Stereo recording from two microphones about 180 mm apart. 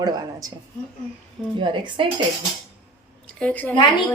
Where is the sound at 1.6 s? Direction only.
25° right (ahead or behind).